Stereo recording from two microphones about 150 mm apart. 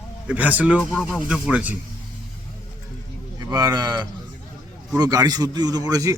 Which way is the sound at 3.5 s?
25° right (ahead or behind).